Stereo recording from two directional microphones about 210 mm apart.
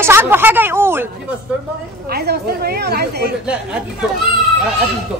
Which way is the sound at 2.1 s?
50° right (ahead or behind).